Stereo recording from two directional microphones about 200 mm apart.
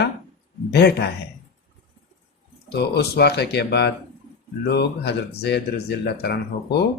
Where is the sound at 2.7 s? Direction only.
55° left (ahead or behind).